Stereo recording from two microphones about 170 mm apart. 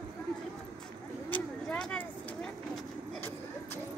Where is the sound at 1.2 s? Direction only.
10° left (ahead or behind).